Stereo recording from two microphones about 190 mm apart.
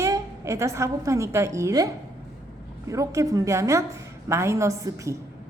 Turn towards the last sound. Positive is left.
turn(degrees=-15)  # may be behind; listen again after turning